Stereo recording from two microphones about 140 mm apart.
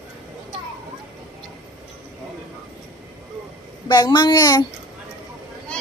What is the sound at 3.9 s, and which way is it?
Speech, 30° left (ahead or behind).